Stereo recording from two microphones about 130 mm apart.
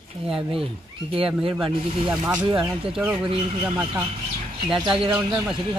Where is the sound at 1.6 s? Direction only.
10° right (ahead or behind).